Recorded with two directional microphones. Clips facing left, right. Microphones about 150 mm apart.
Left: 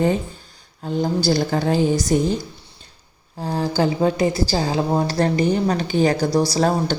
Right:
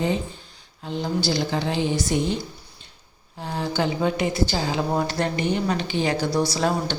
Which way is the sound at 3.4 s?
35° left (ahead or behind).